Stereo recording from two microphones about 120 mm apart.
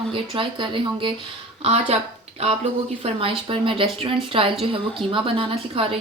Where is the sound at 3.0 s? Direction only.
50° right (ahead or behind).